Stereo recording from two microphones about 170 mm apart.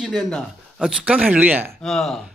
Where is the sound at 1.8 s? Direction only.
Centre (ahead or behind).